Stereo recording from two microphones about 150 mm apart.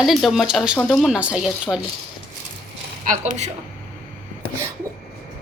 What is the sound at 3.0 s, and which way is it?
Speech, 50° right (ahead or behind).